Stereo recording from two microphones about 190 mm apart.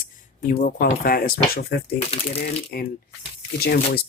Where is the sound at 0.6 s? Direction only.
45° left (ahead or behind).